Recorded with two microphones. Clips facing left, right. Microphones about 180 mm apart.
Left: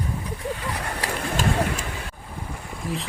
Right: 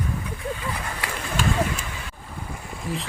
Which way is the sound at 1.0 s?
40° left (ahead or behind).